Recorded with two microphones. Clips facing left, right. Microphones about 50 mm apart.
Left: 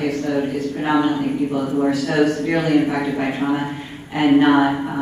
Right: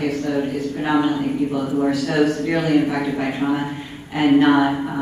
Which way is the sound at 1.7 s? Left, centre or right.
Centre.